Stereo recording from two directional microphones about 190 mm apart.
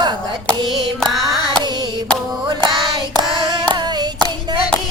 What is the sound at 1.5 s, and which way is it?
Hands, 20° right (ahead or behind).